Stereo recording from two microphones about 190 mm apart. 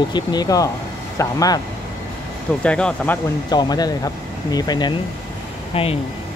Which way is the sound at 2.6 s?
5° left (ahead or behind).